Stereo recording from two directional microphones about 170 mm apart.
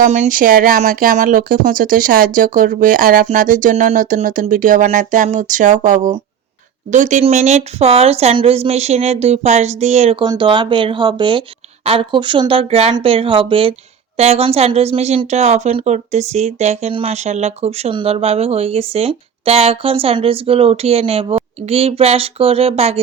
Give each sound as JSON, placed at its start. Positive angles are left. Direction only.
{"t": 0.0, "sound": "speech", "side_deg": -45}